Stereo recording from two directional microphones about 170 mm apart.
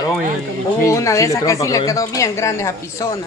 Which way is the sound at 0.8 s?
20° left (ahead or behind).